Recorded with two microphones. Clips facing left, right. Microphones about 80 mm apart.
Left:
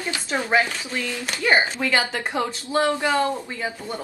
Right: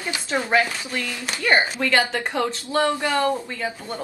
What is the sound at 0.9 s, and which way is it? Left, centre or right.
Speech, centre.